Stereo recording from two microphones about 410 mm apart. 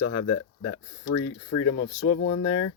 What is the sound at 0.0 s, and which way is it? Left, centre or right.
Speech, left.